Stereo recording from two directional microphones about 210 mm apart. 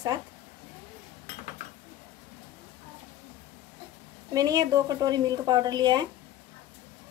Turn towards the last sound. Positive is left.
turn(degrees=-20)  # may be behind; listen again after turning